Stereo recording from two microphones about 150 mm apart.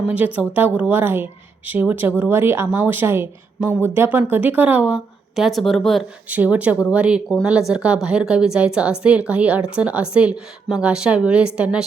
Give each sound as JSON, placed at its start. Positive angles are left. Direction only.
{"t": 0.3, "sound": "speech", "side_deg": -10}
{"t": 6.2, "sound": "speech", "side_deg": -10}